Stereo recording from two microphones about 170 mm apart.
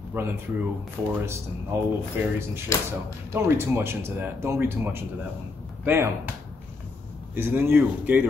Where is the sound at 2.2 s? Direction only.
10° right (ahead or behind).